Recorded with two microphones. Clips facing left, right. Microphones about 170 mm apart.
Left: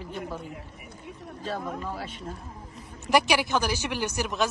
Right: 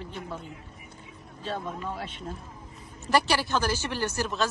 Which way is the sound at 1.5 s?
5° left (ahead or behind).